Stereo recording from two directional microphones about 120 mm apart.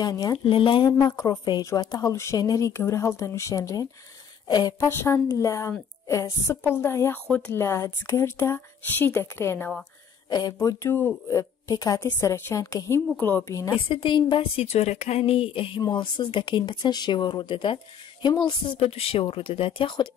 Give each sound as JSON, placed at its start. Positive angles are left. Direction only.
{"t": 0.0, "sound": "speech", "side_deg": 30}
{"t": 0.5, "sound": "a woman's voice", "side_deg": 45}
{"t": 0.8, "sound": "speech", "side_deg": 30}
{"t": 10.3, "sound": "speech", "side_deg": 30}
{"t": 12.1, "sound": "speech", "side_deg": 20}
{"t": 13.7, "sound": "a woman's voice", "side_deg": 45}